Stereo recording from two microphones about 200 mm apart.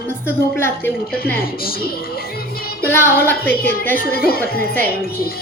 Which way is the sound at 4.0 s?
50° left (ahead or behind).